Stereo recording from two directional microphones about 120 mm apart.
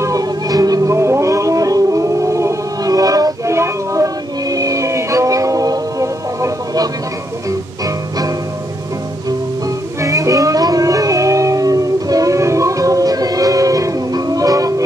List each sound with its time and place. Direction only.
0.0 s music: 30° right (ahead or behind)
10.0 s howl: 30° right (ahead or behind)